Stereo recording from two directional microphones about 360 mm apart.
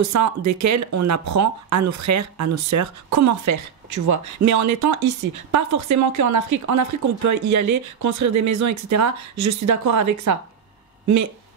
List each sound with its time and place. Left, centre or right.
0.0 s speech: right